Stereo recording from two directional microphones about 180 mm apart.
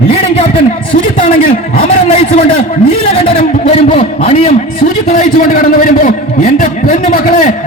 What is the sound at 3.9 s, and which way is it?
Speech, 30° left (ahead or behind).